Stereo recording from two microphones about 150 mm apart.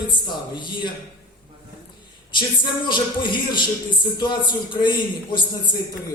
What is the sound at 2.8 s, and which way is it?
A man's voice, 30° left (ahead or behind).